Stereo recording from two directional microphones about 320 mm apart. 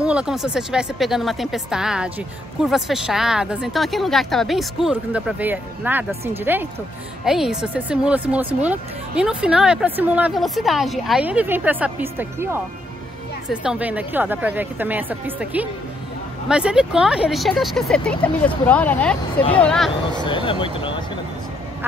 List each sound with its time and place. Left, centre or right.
0.0 s speech: centre
20.2 s speech: centre